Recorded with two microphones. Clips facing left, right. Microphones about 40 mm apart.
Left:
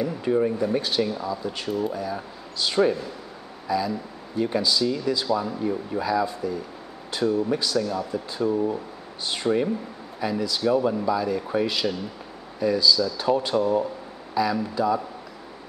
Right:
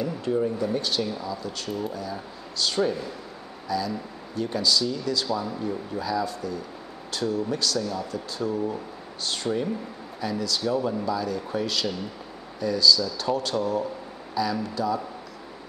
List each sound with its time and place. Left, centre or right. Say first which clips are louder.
0.0 s speech: left 3 dB; centre
7.8 s speech: left 3 dB; centre